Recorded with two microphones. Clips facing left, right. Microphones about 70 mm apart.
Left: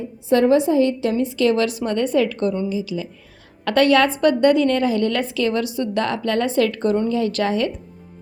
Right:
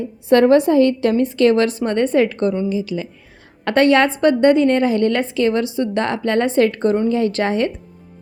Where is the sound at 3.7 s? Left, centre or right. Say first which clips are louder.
Right 2 dB; right.